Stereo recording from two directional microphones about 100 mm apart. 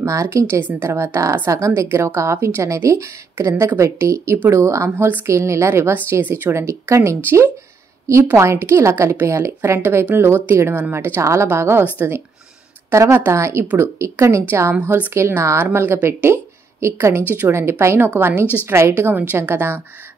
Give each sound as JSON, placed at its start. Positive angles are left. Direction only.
{"t": 0.0, "sound": "a woman's voice", "side_deg": -30}
{"t": 18.4, "sound": "a woman's voice", "side_deg": 20}
{"t": 18.7, "sound": "a woman's voice", "side_deg": -25}